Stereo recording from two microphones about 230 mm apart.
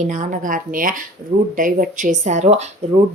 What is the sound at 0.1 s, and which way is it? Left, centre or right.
A woman's voice, right.